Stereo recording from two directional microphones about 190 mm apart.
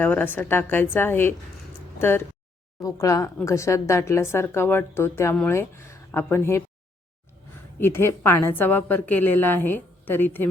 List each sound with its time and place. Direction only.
0.0 s speech: 10° left (ahead or behind)
7.8 s speech: 10° left (ahead or behind)